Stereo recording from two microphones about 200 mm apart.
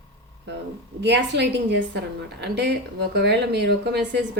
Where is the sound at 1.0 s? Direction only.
60° right (ahead or behind).